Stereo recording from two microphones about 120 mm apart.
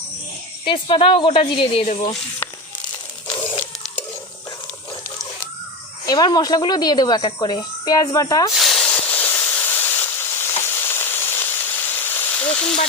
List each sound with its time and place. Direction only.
0.6 s a woman's voice: 45° left (ahead or behind)
6.1 s speech: 35° left (ahead or behind)
8.5 s hiss: centre (ahead or behind); by 10.4 s 20° left (ahead or behind)
10.6 s sizzle: 20° left (ahead or behind)